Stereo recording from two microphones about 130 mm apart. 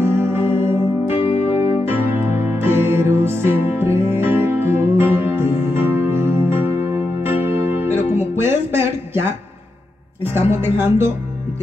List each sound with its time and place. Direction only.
0.0 s music: 20° right (ahead or behind)
1.0 s music: 50° left (ahead or behind)
1.9 s music: 15° right (ahead or behind)
8.4 s speech: 20° right (ahead or behind)